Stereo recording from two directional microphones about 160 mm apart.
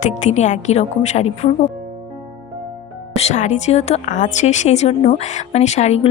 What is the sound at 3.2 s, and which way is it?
A woman's voice, 45° left (ahead or behind).